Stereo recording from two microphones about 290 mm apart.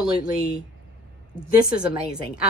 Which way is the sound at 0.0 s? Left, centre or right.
Centre.